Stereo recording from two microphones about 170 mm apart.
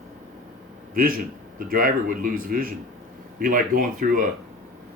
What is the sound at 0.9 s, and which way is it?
Speech, 55° right (ahead or behind).